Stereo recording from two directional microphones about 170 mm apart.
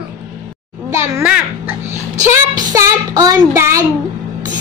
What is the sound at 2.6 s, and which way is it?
Child singing, 20° right (ahead or behind).